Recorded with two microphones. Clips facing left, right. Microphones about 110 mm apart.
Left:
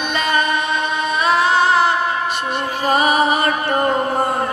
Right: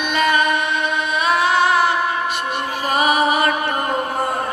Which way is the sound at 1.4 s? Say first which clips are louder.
Even; 30° left (ahead or behind).